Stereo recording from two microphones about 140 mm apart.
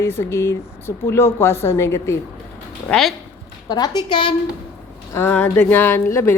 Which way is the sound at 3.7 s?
30° left (ahead or behind).